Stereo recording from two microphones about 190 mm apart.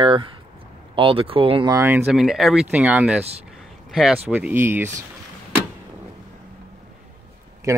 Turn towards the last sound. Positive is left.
turn(degrees=-15)  # may be behind; listen again after turning